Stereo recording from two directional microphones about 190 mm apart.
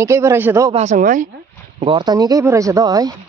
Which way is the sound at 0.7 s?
40° right (ahead or behind).